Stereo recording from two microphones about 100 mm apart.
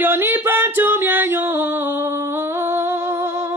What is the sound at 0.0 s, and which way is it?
Singing, 20° right (ahead or behind).